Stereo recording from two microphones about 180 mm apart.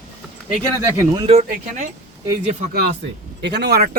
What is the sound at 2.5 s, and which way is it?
Speech, 45° right (ahead or behind).